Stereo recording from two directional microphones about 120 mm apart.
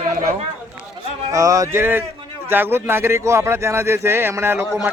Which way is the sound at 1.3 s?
30° right (ahead or behind).